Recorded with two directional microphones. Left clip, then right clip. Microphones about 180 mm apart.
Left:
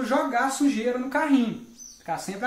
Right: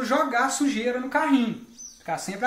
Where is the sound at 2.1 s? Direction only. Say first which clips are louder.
Right 1 dB; 25° right (ahead or behind).